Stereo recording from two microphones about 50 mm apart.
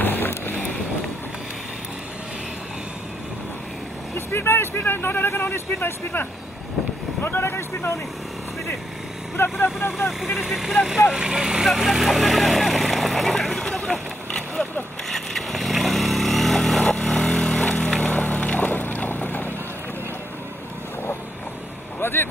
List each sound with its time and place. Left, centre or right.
0.0 s vehicle: left
4.3 s speech: left
9.4 s speech: left
10.3 s speech: centre
11.6 s speech: centre
13.3 s vehicle: centre
17.6 s a sound: centre
18.0 s boat: left
22.0 s vehicle: left